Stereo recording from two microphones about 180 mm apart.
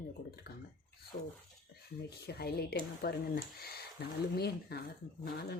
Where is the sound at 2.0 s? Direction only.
65° left (ahead or behind).